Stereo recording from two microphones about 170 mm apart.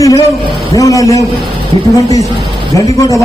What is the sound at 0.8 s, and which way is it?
Speech, 20° left (ahead or behind).